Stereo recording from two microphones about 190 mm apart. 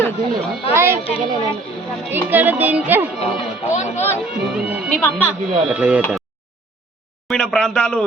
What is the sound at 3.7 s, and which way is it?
Speech, 40° left (ahead or behind).